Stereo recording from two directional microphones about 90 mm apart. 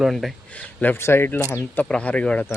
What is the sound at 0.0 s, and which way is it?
Speech, centre (ahead or behind).